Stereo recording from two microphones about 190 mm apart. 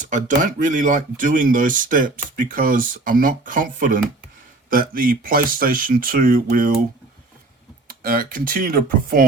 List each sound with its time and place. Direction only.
0.0 s speech: 40° right (ahead or behind)
7.9 s speech: 50° right (ahead or behind)